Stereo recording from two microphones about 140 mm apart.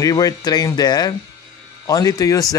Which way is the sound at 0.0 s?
25° left (ahead or behind).